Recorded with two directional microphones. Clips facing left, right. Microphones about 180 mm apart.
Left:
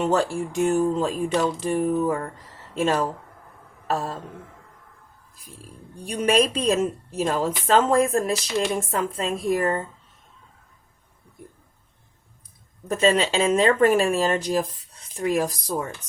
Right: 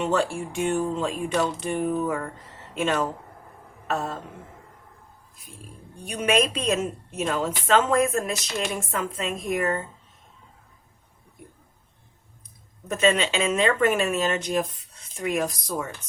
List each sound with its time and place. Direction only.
0.0 s a woman's voice: 40° left (ahead or behind)
6.1 s a woman's voice: 35° left (ahead or behind)
12.9 s a woman's voice: 35° left (ahead or behind)